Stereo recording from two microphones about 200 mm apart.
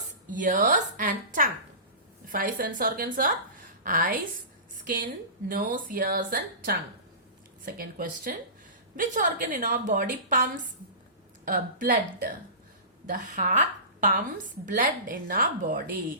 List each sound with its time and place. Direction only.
0.3 s a woman's voice: 40° right (ahead or behind)
5.5 s a woman's voice: 45° right (ahead or behind)
11.4 s a woman's voice: 40° right (ahead or behind)